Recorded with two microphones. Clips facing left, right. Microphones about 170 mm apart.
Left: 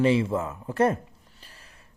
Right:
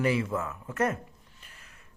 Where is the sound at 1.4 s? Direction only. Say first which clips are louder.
Left 2 dB; 35° left (ahead or behind).